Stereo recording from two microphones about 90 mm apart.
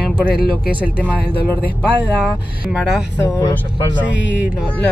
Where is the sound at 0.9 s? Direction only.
15° left (ahead or behind).